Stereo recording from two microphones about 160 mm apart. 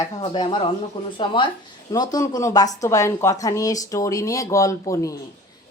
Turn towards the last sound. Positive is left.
turn(degrees=20)  # may be behind; listen again after turning